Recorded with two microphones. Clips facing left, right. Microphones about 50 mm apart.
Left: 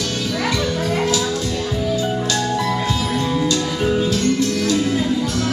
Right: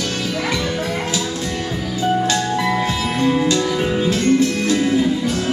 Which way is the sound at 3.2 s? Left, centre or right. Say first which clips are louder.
Right 7 dB; right.